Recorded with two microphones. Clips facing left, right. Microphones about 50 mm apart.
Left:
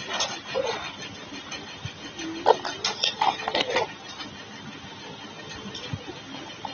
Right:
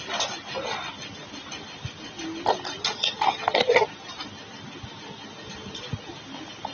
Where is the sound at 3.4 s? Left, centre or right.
Right.